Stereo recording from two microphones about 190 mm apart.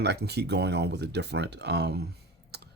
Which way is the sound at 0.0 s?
60° right (ahead or behind).